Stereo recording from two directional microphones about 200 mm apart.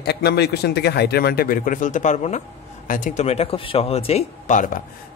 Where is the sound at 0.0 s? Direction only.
55° left (ahead or behind).